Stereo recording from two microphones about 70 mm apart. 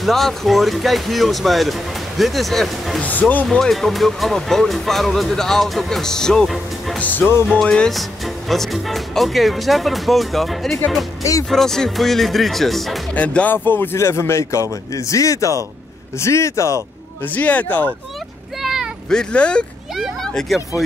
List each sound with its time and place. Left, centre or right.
0.0 s speech: centre
3.0 s speech: left
3.4 s speech: centre
7.0 s speech: left
7.4 s speech: centre
13.1 s speech: centre
13.9 s speech: left
15.0 s speech: left
17.2 s speech: left
18.6 s a sound: centre
19.0 s speech: centre
20.0 s speech: centre